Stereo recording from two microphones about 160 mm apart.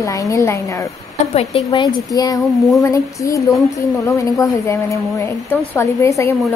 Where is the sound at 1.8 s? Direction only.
25° left (ahead or behind).